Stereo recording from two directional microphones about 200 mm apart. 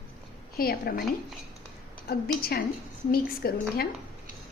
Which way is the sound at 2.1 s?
50° left (ahead or behind).